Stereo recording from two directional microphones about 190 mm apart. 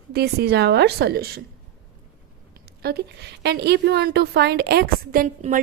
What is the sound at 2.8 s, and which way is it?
A woman's voice, 55° right (ahead or behind).